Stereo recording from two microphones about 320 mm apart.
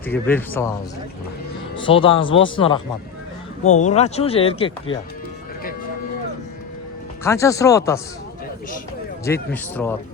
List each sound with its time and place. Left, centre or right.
0.0 s speech: centre
1.8 s speech: centre
7.3 s speech: centre
9.2 s speech: centre